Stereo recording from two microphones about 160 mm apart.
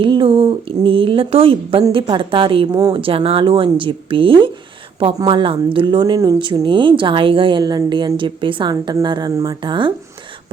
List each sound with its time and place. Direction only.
0.0 s speech: 30° right (ahead or behind)